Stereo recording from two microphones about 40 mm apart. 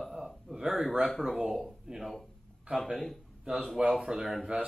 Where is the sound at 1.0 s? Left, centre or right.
Centre.